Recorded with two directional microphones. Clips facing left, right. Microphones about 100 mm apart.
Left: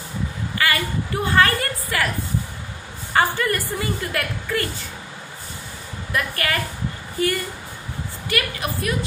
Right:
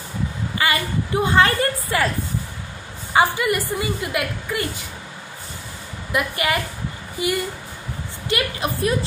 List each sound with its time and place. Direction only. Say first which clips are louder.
0.6 s speech: right 1 dB; 20° right (ahead or behind)
3.1 s a woman's voice: right 2 dB; 15° right (ahead or behind)
6.1 s a woman's voice: right 2 dB; 15° right (ahead or behind)